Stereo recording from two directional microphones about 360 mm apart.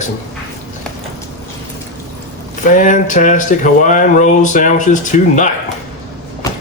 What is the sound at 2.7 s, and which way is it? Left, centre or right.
Speech, left.